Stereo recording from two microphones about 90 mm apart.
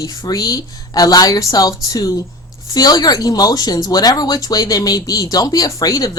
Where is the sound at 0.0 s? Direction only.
40° left (ahead or behind).